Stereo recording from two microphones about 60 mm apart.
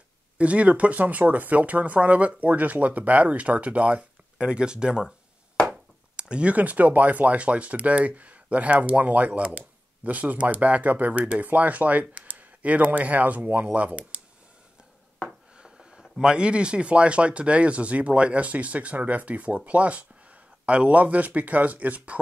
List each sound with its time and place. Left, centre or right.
0.4 s speech: right
15.5 s speech: centre